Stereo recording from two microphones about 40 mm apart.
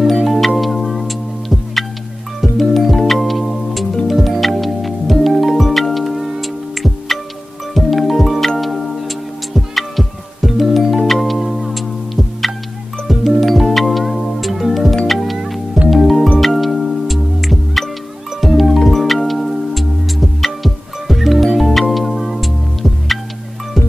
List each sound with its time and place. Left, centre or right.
0.0 s music: centre